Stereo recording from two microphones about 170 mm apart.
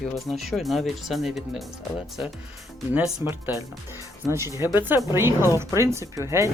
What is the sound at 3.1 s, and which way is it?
Speech, 20° right (ahead or behind).